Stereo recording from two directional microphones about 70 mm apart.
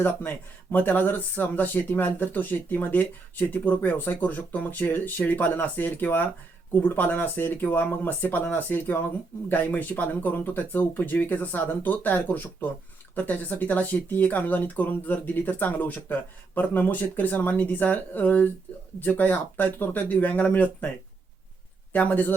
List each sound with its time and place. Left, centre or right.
0.0 s speech: left
21.9 s speech: left